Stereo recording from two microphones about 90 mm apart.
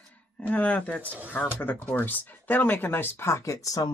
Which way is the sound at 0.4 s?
15° left (ahead or behind).